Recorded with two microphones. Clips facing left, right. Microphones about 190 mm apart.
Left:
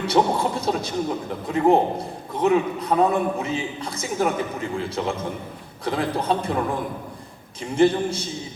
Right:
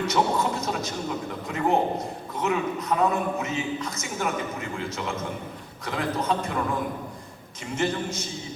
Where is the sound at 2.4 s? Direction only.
30° left (ahead or behind).